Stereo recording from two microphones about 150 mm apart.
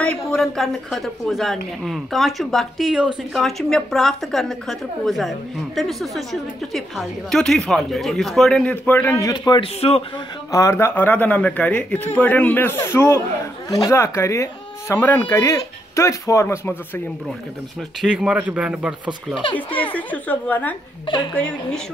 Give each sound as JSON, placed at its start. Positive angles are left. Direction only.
{"t": 0.0, "sound": "a woman's voice", "side_deg": 5}
{"t": 9.5, "sound": "a man's voice", "side_deg": 40}
{"t": 10.5, "sound": "speech", "side_deg": 20}
{"t": 18.0, "sound": "a man's voice", "side_deg": -5}
{"t": 19.5, "sound": "speech", "side_deg": 10}
{"t": 21.1, "sound": "a man's voice", "side_deg": 30}
{"t": 21.4, "sound": "speech", "side_deg": 5}